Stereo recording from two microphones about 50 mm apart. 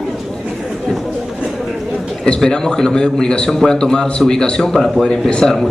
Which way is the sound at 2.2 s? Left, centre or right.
Centre.